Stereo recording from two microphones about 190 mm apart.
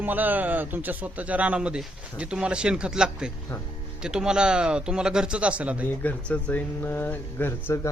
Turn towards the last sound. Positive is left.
turn(degrees=15)  # may be behind; listen again after turning